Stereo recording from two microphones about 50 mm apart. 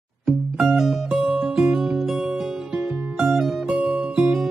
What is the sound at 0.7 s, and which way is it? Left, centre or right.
Music, centre.